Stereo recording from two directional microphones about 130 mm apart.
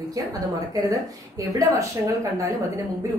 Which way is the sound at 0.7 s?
25° right (ahead or behind).